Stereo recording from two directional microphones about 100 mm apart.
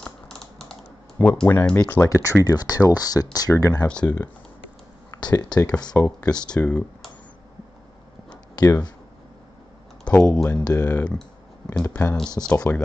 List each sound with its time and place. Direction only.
0.0 s typing: 5° left (ahead or behind)
1.1 s speech: 15° left (ahead or behind)
2.0 s speech: 30° left (ahead or behind)
2.4 s speech: 40° left (ahead or behind)
3.8 s speech: 10° left (ahead or behind)
5.1 s speech: 40° left (ahead or behind)
5.9 s speech: 20° left (ahead or behind)
6.5 s speech: 10° left (ahead or behind)
8.3 s a sound: 40° left (ahead or behind)
10.0 s speech: 10° left (ahead or behind)
10.6 s speech: 40° left (ahead or behind)
10.9 s speech: 15° left (ahead or behind)
11.1 s clicking: 5° left (ahead or behind)
11.8 s speech: 20° left (ahead or behind)